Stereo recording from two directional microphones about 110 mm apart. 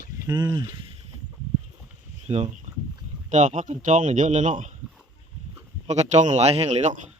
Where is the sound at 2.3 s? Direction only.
65° right (ahead or behind).